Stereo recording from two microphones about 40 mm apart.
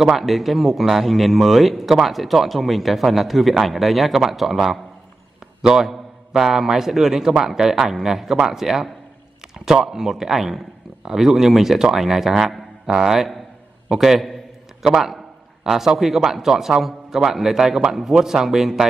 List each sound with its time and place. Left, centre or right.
0.0 s a man's voice: centre